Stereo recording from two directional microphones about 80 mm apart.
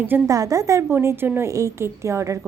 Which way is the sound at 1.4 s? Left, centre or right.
Right.